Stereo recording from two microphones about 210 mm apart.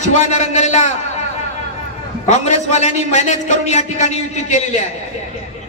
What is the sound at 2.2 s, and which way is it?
A man's voice, 35° left (ahead or behind).